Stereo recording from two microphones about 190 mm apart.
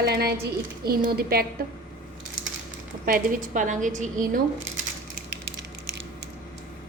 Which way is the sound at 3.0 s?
45° right (ahead or behind).